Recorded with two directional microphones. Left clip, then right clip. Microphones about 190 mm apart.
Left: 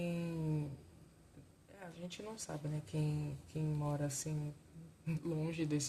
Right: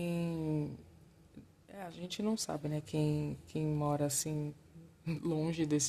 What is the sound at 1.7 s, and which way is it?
Speech, 45° right (ahead or behind).